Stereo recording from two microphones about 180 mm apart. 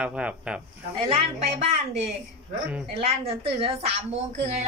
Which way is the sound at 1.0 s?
30° right (ahead or behind).